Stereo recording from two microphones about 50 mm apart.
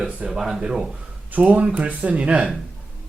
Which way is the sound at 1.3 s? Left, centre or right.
Right.